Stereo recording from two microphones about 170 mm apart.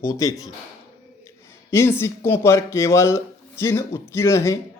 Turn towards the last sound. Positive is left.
turn(degrees=15)  # may be behind; listen again after turning